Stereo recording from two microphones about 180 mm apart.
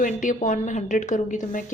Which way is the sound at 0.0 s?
45° left (ahead or behind).